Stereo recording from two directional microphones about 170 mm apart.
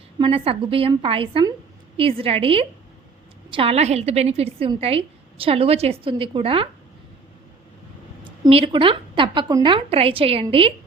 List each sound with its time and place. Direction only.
0.2 s a woman's voice: 30° right (ahead or behind)
8.2 s a woman's voice: 30° right (ahead or behind)